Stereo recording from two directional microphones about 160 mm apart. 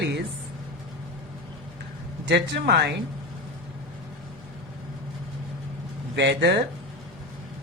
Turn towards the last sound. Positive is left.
turn(degrees=-90)